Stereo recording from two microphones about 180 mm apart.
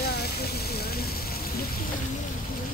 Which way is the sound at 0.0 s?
60° left (ahead or behind).